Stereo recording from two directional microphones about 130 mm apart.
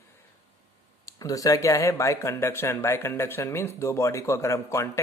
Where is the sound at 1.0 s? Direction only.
25° left (ahead or behind).